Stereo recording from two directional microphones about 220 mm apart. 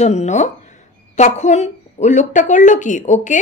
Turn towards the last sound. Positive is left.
turn(degrees=35)  # may be behind; listen again after turning